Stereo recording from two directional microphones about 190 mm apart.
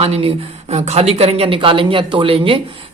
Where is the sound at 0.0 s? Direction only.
30° right (ahead or behind).